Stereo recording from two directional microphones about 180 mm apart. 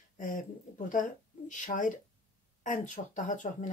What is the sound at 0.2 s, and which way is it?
Speech, 45° left (ahead or behind).